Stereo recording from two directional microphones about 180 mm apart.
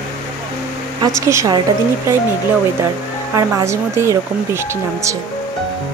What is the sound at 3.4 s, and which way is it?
Speech, 15° right (ahead or behind).